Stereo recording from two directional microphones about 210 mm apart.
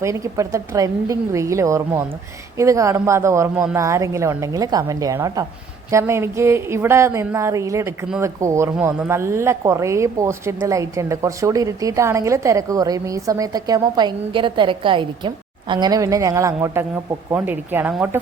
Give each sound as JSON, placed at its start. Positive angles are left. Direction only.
{"t": 0.0, "sound": "speech", "side_deg": -15}